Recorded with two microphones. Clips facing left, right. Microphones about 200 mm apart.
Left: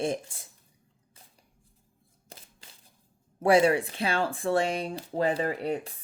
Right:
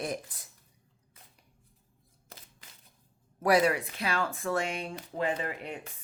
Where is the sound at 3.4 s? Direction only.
30° left (ahead or behind).